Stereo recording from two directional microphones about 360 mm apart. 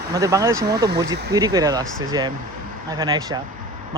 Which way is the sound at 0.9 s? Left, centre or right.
Right.